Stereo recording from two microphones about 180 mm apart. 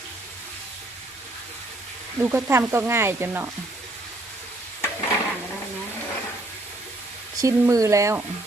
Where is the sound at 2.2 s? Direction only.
15° right (ahead or behind).